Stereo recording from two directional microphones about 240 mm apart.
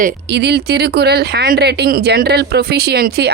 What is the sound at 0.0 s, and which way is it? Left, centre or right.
Speech, right.